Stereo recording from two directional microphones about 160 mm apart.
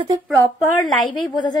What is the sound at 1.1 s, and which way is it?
Speech, 30° left (ahead or behind).